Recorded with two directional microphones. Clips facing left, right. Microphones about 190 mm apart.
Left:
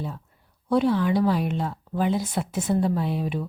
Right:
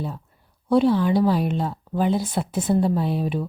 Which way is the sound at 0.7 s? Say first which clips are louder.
Right 3 dB; 30° right (ahead or behind).